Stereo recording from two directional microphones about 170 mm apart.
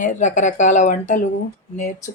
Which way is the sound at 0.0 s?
45° left (ahead or behind).